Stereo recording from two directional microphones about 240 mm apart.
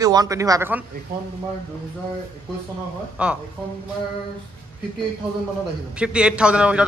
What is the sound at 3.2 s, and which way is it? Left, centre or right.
Speech, centre.